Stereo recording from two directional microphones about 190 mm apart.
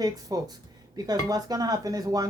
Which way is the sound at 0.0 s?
20° right (ahead or behind).